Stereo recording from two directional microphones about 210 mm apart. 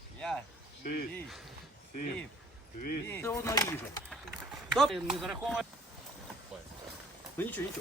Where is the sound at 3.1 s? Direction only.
10° left (ahead or behind).